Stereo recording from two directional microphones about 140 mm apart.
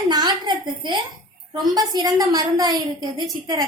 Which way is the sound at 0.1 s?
30° right (ahead or behind).